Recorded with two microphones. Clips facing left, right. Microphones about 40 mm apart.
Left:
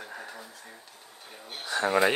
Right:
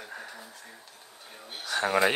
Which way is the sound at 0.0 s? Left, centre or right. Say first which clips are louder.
Left 1 dB; centre.